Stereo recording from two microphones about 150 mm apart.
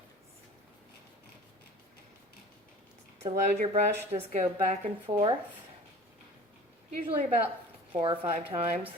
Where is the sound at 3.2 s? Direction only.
50° right (ahead or behind).